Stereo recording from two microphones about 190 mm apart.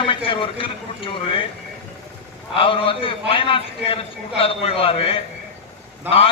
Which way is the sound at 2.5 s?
30° left (ahead or behind).